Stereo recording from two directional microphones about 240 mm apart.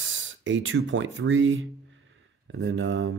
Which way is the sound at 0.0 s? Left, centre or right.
Right.